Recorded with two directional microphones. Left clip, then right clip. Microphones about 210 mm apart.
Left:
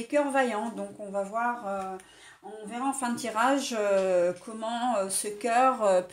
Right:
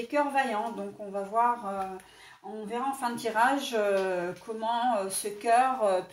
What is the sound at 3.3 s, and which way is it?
Speech, 45° left (ahead or behind).